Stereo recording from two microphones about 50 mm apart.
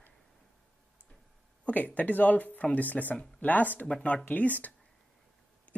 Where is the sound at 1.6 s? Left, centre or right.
Left.